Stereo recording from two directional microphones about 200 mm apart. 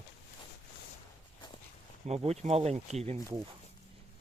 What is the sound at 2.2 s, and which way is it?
Speech, 30° right (ahead or behind).